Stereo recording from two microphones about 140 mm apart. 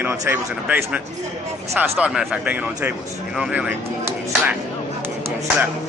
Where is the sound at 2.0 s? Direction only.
10° right (ahead or behind).